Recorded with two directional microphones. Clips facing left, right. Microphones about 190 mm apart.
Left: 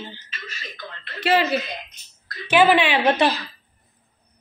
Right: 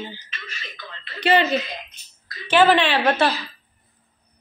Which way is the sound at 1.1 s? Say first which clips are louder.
Right 1 dB; centre (ahead or behind).